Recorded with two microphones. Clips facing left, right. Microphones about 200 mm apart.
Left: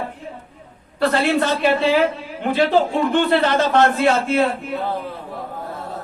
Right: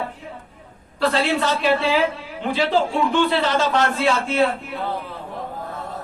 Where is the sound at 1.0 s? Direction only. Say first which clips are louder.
Left 2 dB; 55° left (ahead or behind).